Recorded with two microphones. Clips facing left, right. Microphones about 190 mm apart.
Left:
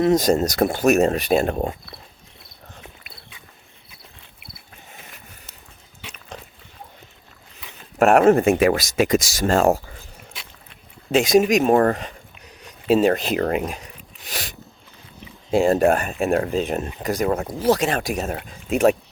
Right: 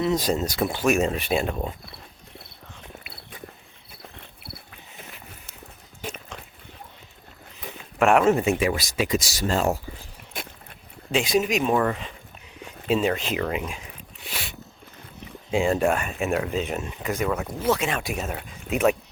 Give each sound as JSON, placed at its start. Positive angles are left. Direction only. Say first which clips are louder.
{"t": 0.0, "sound": "speech", "louder": "left 6 dB", "side_deg": 45}
{"t": 7.9, "sound": "speech", "louder": "left 5 dB", "side_deg": 45}
{"t": 10.3, "sound": "a sound", "louder": "right 9 dB", "side_deg": -50}
{"t": 11.1, "sound": "speech", "louder": "left 7 dB", "side_deg": 45}
{"t": 12.6, "sound": "a sound", "louder": "left 6 dB", "side_deg": 45}
{"t": 15.4, "sound": "speech", "louder": "left 5 dB", "side_deg": 40}